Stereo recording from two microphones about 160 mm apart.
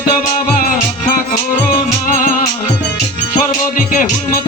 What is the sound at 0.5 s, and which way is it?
Music, 60° left (ahead or behind).